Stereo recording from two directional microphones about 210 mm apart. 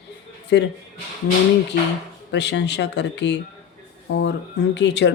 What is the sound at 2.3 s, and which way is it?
Speech, 55° left (ahead or behind).